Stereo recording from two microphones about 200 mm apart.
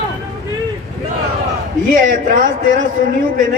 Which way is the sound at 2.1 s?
40° right (ahead or behind).